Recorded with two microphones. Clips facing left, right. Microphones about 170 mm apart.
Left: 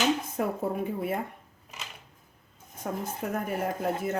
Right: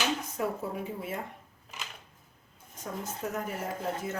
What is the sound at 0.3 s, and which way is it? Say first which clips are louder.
Speech: left 4 dB; 55° left (ahead or behind).